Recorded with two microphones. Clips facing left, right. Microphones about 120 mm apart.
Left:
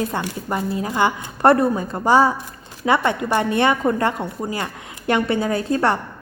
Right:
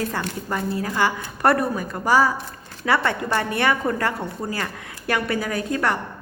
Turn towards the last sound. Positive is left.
turn(degrees=30)  # may be behind; listen again after turning